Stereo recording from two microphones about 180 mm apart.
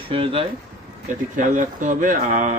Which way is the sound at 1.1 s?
45° right (ahead or behind).